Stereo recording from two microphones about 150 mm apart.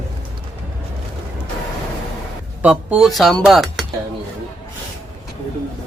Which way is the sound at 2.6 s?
10° right (ahead or behind).